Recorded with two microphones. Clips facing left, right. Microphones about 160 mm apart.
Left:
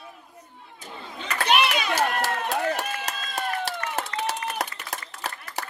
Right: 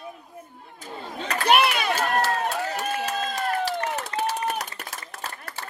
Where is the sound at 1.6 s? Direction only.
50° right (ahead or behind).